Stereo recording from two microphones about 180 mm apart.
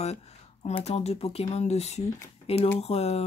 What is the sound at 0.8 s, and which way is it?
Speech, 35° left (ahead or behind).